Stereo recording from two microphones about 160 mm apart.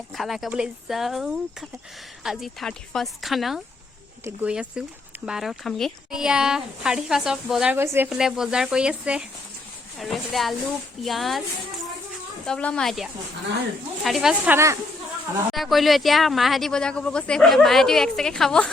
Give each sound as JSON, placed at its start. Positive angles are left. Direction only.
{"t": 0.2, "sound": "speech", "side_deg": 0}
{"t": 12.5, "sound": "speech", "side_deg": 5}
{"t": 14.5, "sound": "speech", "side_deg": -20}
{"t": 15.5, "sound": "speech", "side_deg": 0}